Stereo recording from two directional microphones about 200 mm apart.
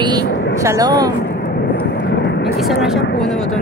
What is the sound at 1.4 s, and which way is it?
Vehicle, 50° left (ahead or behind).